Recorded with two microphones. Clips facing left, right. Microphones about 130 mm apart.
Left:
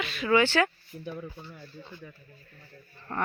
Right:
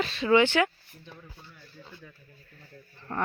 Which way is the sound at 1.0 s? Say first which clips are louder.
Left 11 dB; 70° left (ahead or behind).